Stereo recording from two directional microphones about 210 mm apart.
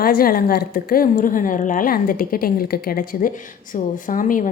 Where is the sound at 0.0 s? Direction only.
45° left (ahead or behind).